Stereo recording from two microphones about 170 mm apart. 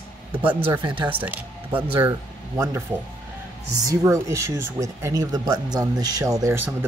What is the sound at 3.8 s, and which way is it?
Speech, 20° right (ahead or behind).